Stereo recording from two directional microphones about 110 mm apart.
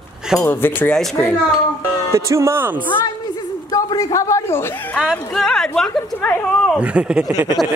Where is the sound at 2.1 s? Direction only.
25° right (ahead or behind).